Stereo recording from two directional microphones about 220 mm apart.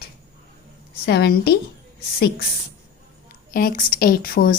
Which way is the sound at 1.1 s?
45° left (ahead or behind).